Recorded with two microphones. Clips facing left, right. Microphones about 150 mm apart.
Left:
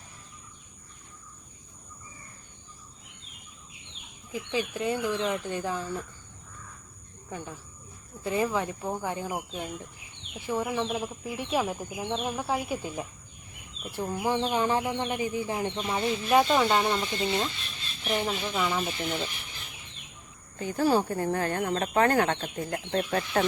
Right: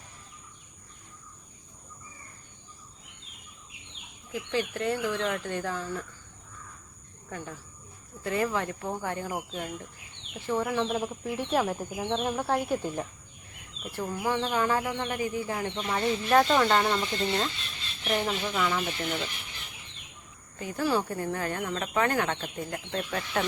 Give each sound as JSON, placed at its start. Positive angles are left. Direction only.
{"t": 4.3, "sound": "speech", "side_deg": 15}
{"t": 7.3, "sound": "speech", "side_deg": 15}
{"t": 13.9, "sound": "speech", "side_deg": 20}
{"t": 20.6, "sound": "speech", "side_deg": 35}